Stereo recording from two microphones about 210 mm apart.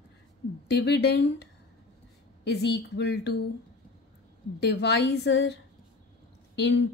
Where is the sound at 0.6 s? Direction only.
50° left (ahead or behind).